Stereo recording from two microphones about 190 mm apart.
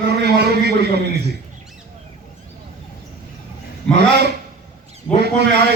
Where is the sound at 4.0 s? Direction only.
60° right (ahead or behind).